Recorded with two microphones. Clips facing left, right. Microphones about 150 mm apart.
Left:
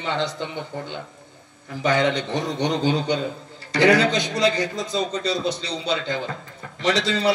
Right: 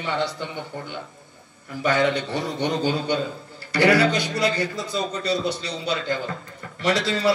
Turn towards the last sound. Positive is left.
turn(degrees=20)  # may be behind; listen again after turning